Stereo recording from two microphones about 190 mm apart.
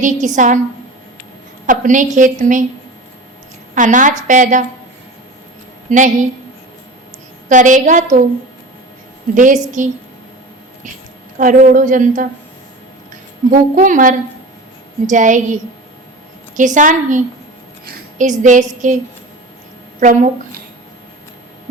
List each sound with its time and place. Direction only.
0.0 s a woman's voice: 40° right (ahead or behind)
1.6 s a woman's voice: 45° right (ahead or behind)
3.8 s a woman's voice: 45° right (ahead or behind)
5.9 s a woman's voice: 40° right (ahead or behind)
7.4 s a woman's voice: 40° right (ahead or behind)
9.3 s a woman's voice: 40° right (ahead or behind)
11.3 s a woman's voice: 45° right (ahead or behind)
13.5 s a woman's voice: 45° right (ahead or behind)
16.6 s a woman's voice: 40° right (ahead or behind)
20.0 s a woman's voice: 40° right (ahead or behind)